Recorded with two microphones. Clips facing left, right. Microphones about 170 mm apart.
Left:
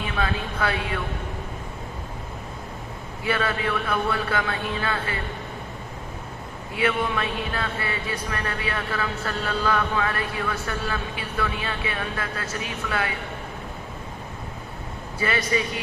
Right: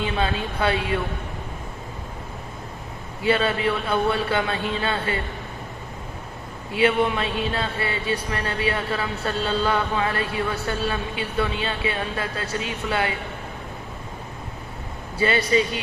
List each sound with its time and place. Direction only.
0.0 s speech: 25° right (ahead or behind)
3.2 s speech: 25° right (ahead or behind)
6.7 s speech: 25° right (ahead or behind)
15.2 s speech: 25° right (ahead or behind)